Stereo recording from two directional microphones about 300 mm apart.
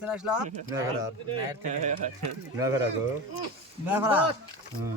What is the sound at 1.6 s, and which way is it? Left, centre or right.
Speech, right.